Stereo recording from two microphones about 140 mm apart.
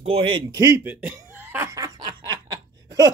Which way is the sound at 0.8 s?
15° right (ahead or behind).